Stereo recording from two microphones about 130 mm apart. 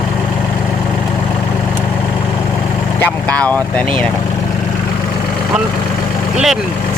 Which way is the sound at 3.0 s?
10° left (ahead or behind).